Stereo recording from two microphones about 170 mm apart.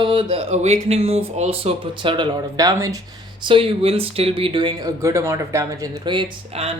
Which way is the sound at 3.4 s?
30° right (ahead or behind).